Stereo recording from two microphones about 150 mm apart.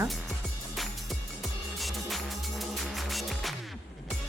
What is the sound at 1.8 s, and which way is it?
Music, centre (ahead or behind).